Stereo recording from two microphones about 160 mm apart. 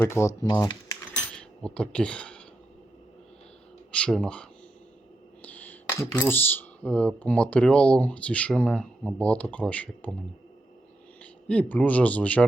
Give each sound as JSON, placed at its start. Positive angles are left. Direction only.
{"t": 0.0, "sound": "speech", "side_deg": 15}
{"t": 0.5, "sound": "typewriter", "side_deg": 20}
{"t": 1.4, "sound": "speech", "side_deg": 5}
{"t": 3.9, "sound": "speech", "side_deg": 5}
{"t": 11.2, "sound": "a man's voice", "side_deg": 10}